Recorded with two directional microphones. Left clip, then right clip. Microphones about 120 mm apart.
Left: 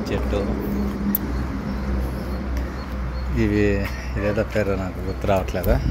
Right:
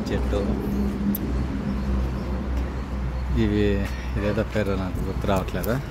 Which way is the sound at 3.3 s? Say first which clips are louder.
Left 3 dB; centre (ahead or behind).